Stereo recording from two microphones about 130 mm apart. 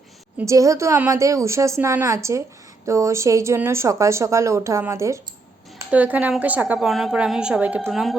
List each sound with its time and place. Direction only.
0.4 s speech: 25° right (ahead or behind)
5.9 s a woman's voice: 10° right (ahead or behind)